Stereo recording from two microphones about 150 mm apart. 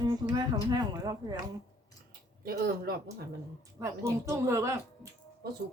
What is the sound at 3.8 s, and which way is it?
Speech, 20° right (ahead or behind).